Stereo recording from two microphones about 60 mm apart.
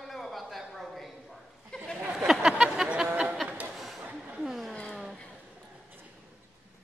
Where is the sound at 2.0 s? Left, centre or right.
Centre.